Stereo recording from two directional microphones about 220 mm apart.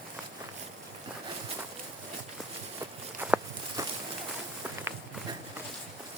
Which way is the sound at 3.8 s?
15° right (ahead or behind).